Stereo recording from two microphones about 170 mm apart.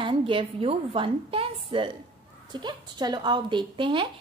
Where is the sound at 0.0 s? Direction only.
30° right (ahead or behind).